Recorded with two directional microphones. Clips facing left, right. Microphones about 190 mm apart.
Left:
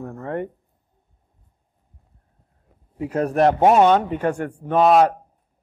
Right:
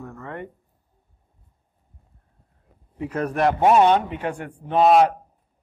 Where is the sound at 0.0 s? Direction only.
40° left (ahead or behind).